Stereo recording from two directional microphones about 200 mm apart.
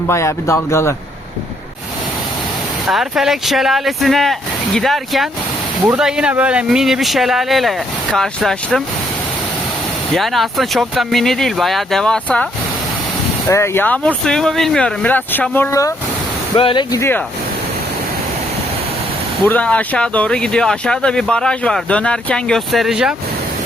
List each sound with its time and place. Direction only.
0.1 s speech: 15° left (ahead or behind)
2.9 s speech: centre (ahead or behind)
10.2 s speech: centre (ahead or behind)
13.5 s speech: 10° left (ahead or behind)
19.5 s speech: 5° left (ahead or behind)